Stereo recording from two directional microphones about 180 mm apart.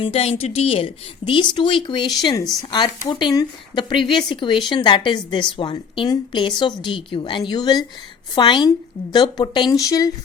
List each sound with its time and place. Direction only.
0.0 s speech: 30° left (ahead or behind)